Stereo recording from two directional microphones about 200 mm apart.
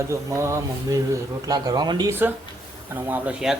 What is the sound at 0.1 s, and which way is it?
Speech, 15° right (ahead or behind).